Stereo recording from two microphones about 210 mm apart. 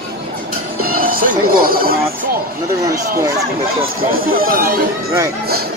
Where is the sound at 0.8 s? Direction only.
45° right (ahead or behind).